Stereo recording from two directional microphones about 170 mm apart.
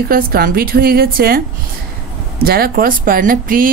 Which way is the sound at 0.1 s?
60° right (ahead or behind).